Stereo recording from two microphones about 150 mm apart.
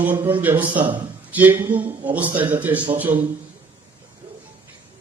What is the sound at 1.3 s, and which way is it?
A man's voice, 10° right (ahead or behind).